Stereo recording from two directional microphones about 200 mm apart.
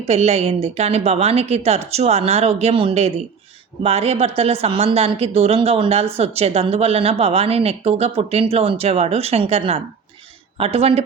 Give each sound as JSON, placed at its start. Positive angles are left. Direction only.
{"t": 0.1, "sound": "a woman's voice", "side_deg": -30}